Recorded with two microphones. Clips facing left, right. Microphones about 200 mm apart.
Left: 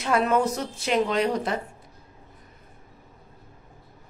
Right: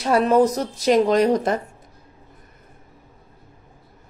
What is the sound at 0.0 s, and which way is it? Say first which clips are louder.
Speech: right 6 dB; 35° right (ahead or behind).